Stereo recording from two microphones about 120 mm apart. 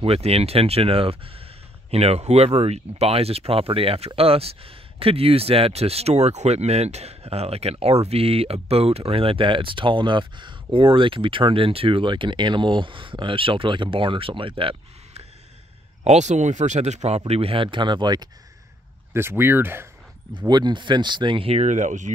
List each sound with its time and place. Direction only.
0.0 s speech: 55° right (ahead or behind)
16.0 s speech: 70° right (ahead or behind)
17.3 s speech: 55° right (ahead or behind); by 18.3 s 35° right (ahead or behind)
19.1 s speech: 20° right (ahead or behind)
20.3 s speech: 35° right (ahead or behind)
21.6 s speech: 90° right